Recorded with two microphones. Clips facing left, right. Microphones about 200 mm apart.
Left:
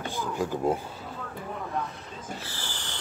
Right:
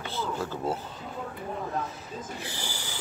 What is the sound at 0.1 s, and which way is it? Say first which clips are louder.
Speech: left 1 dB; 15° left (ahead or behind).